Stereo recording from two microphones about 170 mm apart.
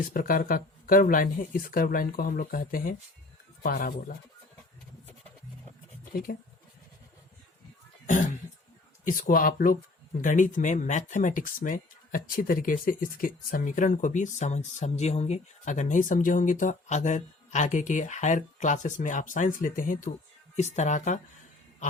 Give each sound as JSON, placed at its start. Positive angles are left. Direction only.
{"t": 0.0, "sound": "speech", "side_deg": 55}
{"t": 8.0, "sound": "speech", "side_deg": 50}
{"t": 20.6, "sound": "speech", "side_deg": 40}